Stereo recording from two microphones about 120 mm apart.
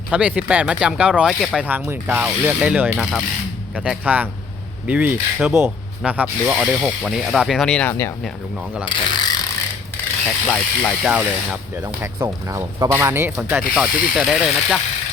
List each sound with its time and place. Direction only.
0.1 s speech: 10° right (ahead or behind)
1.6 s speech: 15° right (ahead or behind); by 7.9 s 10° left (ahead or behind)
8.8 s mechanisms: 40° left (ahead or behind)
10.4 s speech: centre (ahead or behind)
11.1 s speech: 10° right (ahead or behind)
12.2 s speech: 25° right (ahead or behind)
13.7 s speech: 5° right (ahead or behind)